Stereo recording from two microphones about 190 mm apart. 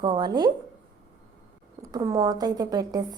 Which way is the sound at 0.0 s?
20° right (ahead or behind).